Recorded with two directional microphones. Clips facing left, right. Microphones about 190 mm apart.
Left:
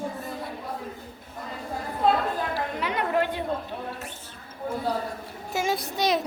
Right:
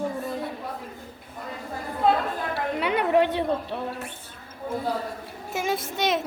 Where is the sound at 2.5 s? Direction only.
70° right (ahead or behind).